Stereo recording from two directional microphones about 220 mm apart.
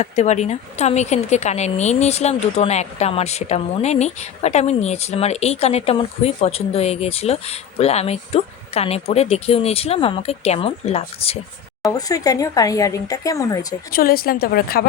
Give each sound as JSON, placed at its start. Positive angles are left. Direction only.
{"t": 0.0, "sound": "speech", "side_deg": 30}
{"t": 11.9, "sound": "speech", "side_deg": 15}
{"t": 13.9, "sound": "a woman's voice", "side_deg": 40}